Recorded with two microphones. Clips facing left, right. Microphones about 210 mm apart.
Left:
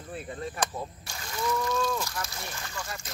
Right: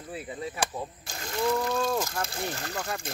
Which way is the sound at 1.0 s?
50° right (ahead or behind).